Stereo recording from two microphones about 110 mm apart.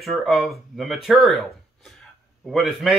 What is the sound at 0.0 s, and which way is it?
Speech, centre (ahead or behind).